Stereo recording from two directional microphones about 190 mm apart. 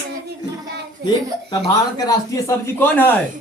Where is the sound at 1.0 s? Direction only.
60° right (ahead or behind).